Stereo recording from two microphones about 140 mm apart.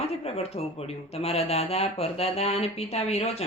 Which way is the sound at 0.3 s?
45° left (ahead or behind).